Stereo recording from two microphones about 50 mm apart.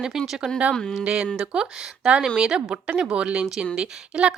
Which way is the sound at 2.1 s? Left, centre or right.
Right.